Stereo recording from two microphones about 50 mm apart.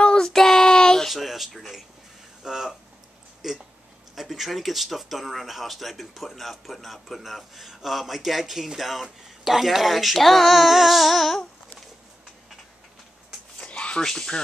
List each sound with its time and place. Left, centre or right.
0.0 s child singing: centre
1.0 s speech: centre
13.6 s a sound: left
14.0 s speech: centre